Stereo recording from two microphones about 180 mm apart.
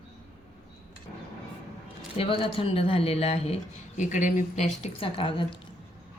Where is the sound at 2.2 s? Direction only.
30° left (ahead or behind).